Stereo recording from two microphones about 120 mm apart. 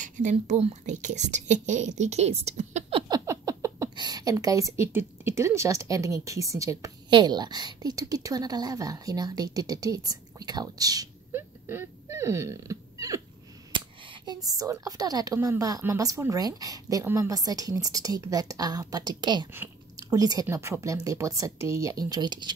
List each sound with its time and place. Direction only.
0.0 s speech: 90° right; by 2.8 s 70° right (ahead or behind)
3.1 s a sound: 25° right (ahead or behind)
3.9 s a woman's voice: 35° right (ahead or behind)
7.1 s a woman's voice: 40° right (ahead or behind)
11.3 s a sound: 20° right (ahead or behind)
13.7 s a woman's voice: 40° right (ahead or behind)